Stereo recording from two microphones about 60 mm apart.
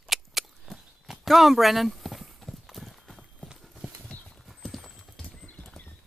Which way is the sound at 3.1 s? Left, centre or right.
Centre.